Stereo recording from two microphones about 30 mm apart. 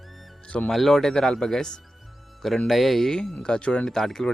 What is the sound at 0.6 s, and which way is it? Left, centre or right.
Speech, centre.